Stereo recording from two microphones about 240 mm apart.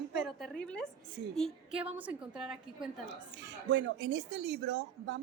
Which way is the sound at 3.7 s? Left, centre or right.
Right.